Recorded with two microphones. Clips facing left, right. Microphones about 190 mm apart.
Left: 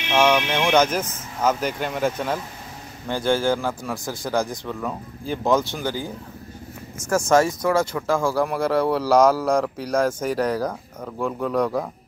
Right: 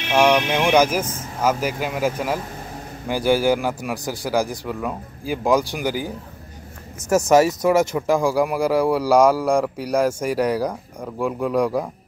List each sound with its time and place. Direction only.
0.1 s a man's voice: 15° right (ahead or behind)